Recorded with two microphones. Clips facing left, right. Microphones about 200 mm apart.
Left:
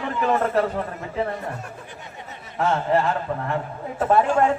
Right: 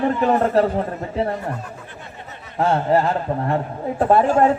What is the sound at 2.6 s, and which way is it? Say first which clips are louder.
A man's voice: right 3 dB; 35° right (ahead or behind).